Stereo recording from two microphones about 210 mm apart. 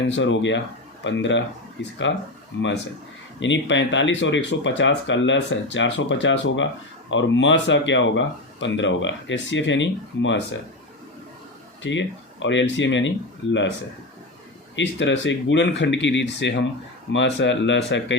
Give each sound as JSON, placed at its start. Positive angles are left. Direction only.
{"t": 0.2, "sound": "speech", "side_deg": 60}
{"t": 3.4, "sound": "speech", "side_deg": 60}
{"t": 11.8, "sound": "speech", "side_deg": 60}
{"t": 14.8, "sound": "speech", "side_deg": 60}